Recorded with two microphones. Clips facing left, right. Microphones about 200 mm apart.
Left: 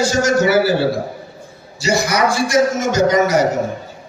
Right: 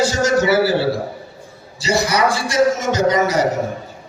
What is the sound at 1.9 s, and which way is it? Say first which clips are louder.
A man's voice: even; 30° right (ahead or behind).